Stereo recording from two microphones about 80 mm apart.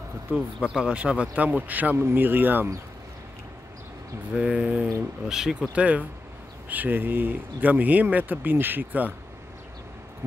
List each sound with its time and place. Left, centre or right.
0.3 s speech: centre
4.4 s speech: centre